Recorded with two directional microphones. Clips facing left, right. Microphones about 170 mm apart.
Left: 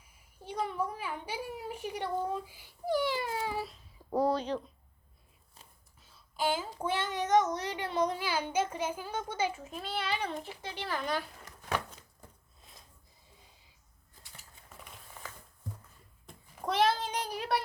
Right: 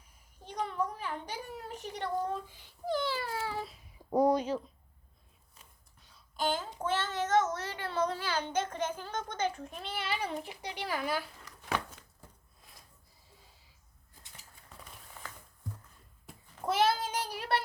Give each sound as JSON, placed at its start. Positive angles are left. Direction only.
{"t": 0.4, "sound": "a woman's voice", "side_deg": 5}
{"t": 4.1, "sound": "speech", "side_deg": -15}
{"t": 5.6, "sound": "whispering", "side_deg": 30}
{"t": 6.0, "sound": "a sound", "side_deg": 5}
{"t": 6.7, "sound": "a child's voice", "side_deg": 10}
{"t": 16.6, "sound": "child singing", "side_deg": -5}